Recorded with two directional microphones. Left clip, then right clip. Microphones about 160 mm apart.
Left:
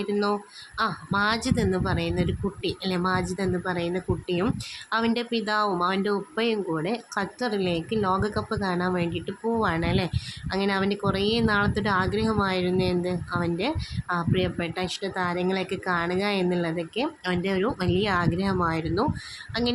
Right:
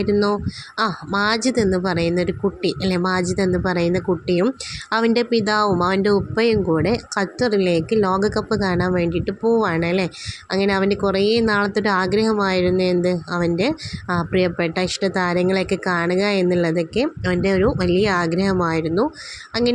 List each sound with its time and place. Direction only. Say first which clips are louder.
0.0 s speech: right 7 dB; 30° right (ahead or behind)